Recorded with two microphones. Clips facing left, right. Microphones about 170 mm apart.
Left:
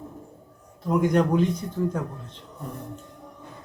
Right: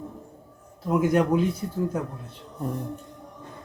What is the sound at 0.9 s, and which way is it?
Speech, 5° right (ahead or behind).